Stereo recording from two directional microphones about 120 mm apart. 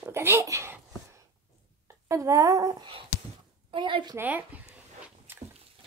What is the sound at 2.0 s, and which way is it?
Speech, 25° right (ahead or behind).